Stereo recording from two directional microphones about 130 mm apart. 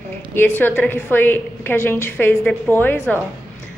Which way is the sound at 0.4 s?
15° left (ahead or behind).